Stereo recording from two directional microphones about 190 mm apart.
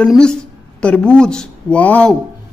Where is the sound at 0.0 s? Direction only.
5° left (ahead or behind).